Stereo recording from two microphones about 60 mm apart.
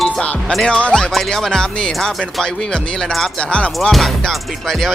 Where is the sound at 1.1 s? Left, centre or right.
Centre.